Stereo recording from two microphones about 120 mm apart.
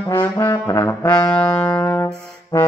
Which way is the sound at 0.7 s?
25° left (ahead or behind).